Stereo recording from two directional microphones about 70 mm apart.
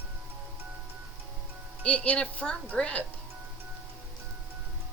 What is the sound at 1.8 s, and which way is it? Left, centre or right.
Speech, centre.